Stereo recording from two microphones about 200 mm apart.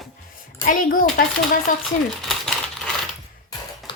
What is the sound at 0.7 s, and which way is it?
Speech, 45° left (ahead or behind).